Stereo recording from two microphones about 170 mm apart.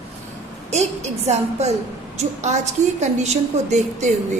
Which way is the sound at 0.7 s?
40° right (ahead or behind).